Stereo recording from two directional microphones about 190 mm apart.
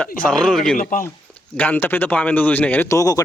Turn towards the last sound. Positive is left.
turn(degrees=15)  # may be behind; listen again after turning